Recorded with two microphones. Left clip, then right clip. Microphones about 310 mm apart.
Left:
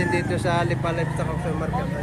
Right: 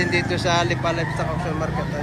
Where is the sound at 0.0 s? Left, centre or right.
Centre.